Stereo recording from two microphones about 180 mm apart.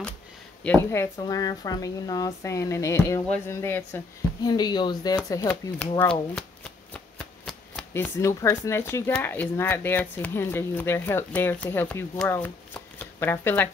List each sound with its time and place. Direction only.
0.7 s speech: 15° left (ahead or behind)
4.4 s speech: 25° left (ahead or behind)
5.5 s speech: 5° left (ahead or behind)
7.9 s speech: 15° left (ahead or behind)